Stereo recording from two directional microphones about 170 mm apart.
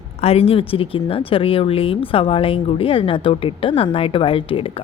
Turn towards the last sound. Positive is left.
turn(degrees=30)  # may be behind; listen again after turning